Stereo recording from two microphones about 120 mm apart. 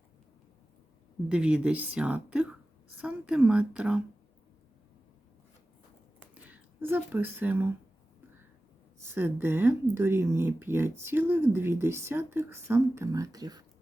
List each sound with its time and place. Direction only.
1.3 s a woman's voice: 10° right (ahead or behind)
6.3 s speech: 15° right (ahead or behind)
9.0 s speech: 20° right (ahead or behind); by 13.7 s 35° right (ahead or behind)